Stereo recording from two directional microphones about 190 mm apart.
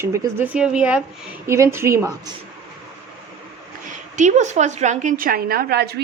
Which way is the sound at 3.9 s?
40° right (ahead or behind).